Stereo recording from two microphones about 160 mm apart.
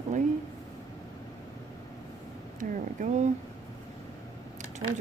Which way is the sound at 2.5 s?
55° right (ahead or behind).